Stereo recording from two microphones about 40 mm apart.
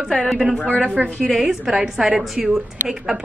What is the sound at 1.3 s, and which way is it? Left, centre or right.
A woman's voice, centre.